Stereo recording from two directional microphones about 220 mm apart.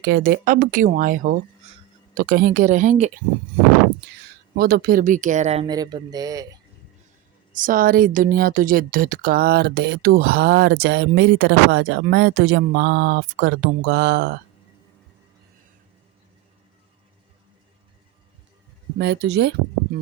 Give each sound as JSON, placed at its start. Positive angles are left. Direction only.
{"t": 0.1, "sound": "speech", "side_deg": -40}
{"t": 4.5, "sound": "speech", "side_deg": -45}
{"t": 7.5, "sound": "speech", "side_deg": -40}
{"t": 18.9, "sound": "speech", "side_deg": -50}